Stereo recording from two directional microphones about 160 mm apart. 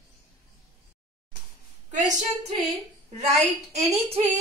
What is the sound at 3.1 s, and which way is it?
A woman's voice, 45° right (ahead or behind).